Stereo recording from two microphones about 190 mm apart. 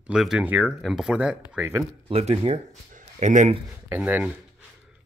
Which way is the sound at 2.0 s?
30° right (ahead or behind).